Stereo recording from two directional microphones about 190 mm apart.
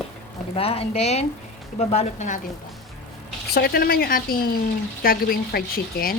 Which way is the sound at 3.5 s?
55° left (ahead or behind).